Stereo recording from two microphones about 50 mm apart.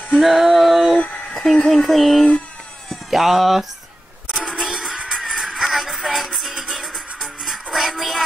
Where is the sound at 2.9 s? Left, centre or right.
Centre.